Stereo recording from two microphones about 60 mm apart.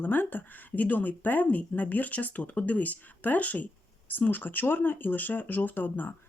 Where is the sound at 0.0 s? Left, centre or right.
Left.